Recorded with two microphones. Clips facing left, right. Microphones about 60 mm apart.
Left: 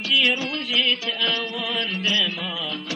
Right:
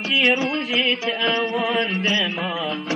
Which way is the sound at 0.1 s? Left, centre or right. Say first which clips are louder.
Right 3 dB; right.